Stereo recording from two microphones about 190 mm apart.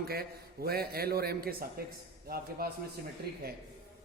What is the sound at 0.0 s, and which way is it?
A man's voice, 55° right (ahead or behind).